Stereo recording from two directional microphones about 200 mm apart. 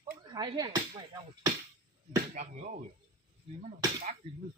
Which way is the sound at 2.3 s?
40° right (ahead or behind).